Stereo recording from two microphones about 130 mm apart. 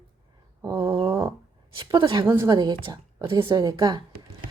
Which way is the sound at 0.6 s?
20° right (ahead or behind).